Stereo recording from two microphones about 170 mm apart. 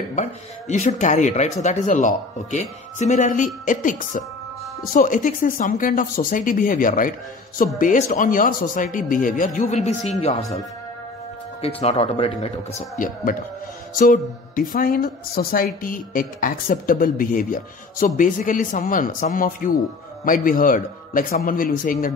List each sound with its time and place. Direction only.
0.1 s speech: 45° left (ahead or behind)
11.6 s a woman's voice: 40° left (ahead or behind); by 21.9 s 55° left (ahead or behind)